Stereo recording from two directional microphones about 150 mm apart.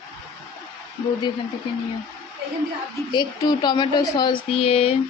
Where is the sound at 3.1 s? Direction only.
30° left (ahead or behind).